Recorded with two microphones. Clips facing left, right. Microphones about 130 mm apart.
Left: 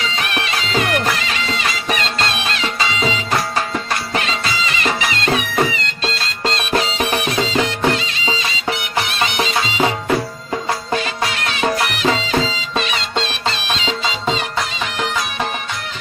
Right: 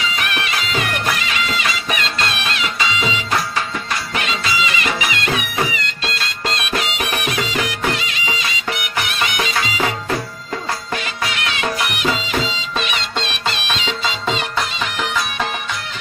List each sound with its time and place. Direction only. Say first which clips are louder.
4.7 s music: left 1 dB; 35° left (ahead or behind)
11.6 s music: left 4 dB; 35° left (ahead or behind)